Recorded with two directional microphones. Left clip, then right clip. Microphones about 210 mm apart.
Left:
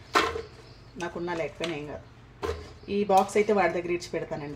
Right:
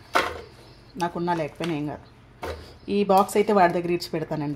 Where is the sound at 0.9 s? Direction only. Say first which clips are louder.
Right 7 dB; 40° right (ahead or behind).